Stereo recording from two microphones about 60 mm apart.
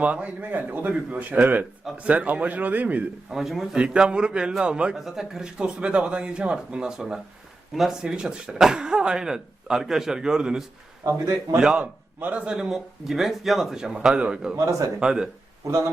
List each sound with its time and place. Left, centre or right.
0.0 s a man's voice: right
3.2 s speech: centre
3.8 s speech: centre
4.9 s speech: centre
8.0 s speech: centre
11.8 s a man's voice: right
12.5 s speech: centre
14.5 s a man's voice: right
14.9 s speech: centre